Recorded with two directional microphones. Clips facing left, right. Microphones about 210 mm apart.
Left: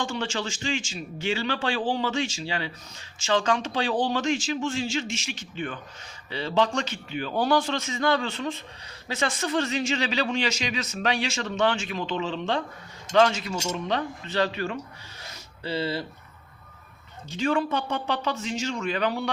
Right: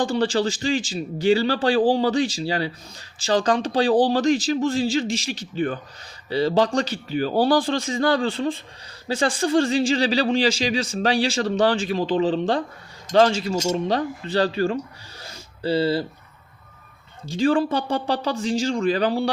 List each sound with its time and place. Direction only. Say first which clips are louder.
0.0 s speech: right 9 dB; 35° right (ahead or behind)
15.2 s a sound: right 9 dB; 30° right (ahead or behind)
17.2 s speech: right 6 dB; 30° right (ahead or behind)